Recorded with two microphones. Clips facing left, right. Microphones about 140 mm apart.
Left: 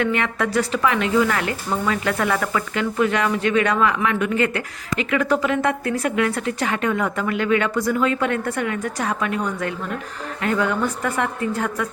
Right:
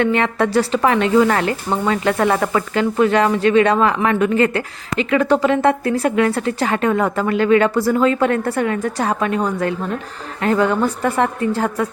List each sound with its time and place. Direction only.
0.0 s a woman's voice: 30° right (ahead or behind)